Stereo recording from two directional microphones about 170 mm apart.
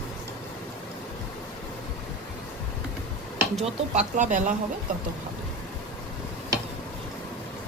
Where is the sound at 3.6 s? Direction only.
45° right (ahead or behind).